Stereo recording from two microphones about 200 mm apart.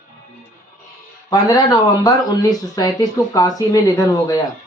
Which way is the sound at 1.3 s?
20° left (ahead or behind).